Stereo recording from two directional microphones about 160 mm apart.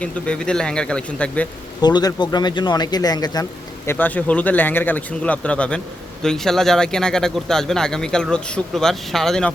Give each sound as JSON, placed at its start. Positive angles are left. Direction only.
{"t": 0.0, "sound": "speech", "side_deg": 5}
{"t": 1.8, "sound": "speech", "side_deg": 25}
{"t": 3.8, "sound": "a man's voice", "side_deg": 10}